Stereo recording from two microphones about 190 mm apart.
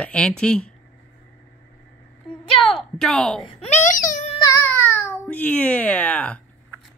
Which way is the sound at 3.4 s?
30° left (ahead or behind).